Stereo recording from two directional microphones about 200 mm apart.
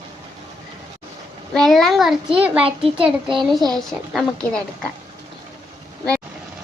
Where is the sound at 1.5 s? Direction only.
Centre (ahead or behind).